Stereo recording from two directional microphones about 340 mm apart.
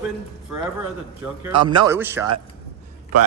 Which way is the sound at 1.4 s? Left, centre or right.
Centre.